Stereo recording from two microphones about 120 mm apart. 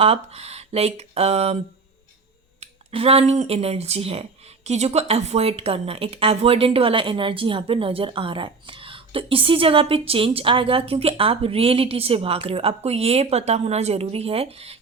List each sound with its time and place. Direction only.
0.0 s speech: 60° right (ahead or behind)
2.6 s speech: 55° right (ahead or behind)